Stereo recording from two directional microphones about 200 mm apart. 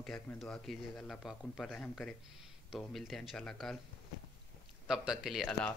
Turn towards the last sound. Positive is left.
turn(degrees=0)  # may be behind; listen again after turning